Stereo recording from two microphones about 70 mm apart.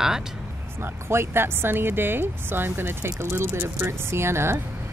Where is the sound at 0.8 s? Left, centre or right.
Right.